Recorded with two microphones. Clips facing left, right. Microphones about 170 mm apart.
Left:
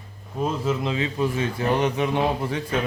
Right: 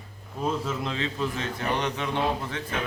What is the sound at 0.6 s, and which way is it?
A man's voice, 5° left (ahead or behind).